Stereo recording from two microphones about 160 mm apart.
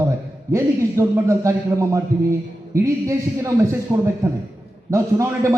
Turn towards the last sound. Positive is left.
turn(degrees=-20)  # may be behind; listen again after turning